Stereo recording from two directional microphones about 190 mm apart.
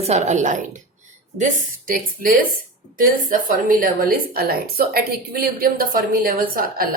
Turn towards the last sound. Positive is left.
turn(degrees=-50)  # may be behind; listen again after turning